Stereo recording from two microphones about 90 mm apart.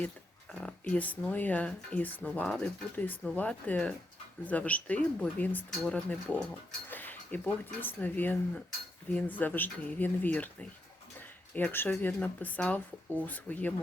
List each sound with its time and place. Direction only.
0.5 s speech: 10° left (ahead or behind)